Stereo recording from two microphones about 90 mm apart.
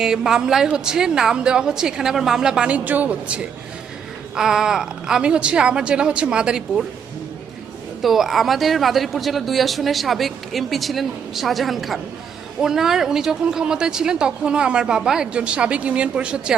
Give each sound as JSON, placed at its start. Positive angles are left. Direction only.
{"t": 0.0, "sound": "speech", "side_deg": -5}
{"t": 8.0, "sound": "a woman's voice", "side_deg": 0}